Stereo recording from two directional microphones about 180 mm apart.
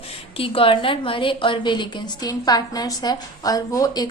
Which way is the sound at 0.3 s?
30° left (ahead or behind).